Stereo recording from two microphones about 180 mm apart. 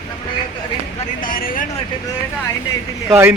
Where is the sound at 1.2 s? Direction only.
50° left (ahead or behind).